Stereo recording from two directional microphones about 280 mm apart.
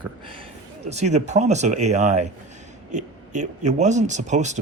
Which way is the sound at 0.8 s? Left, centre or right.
Right.